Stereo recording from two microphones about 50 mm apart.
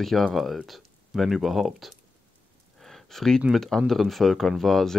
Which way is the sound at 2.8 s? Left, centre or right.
Centre.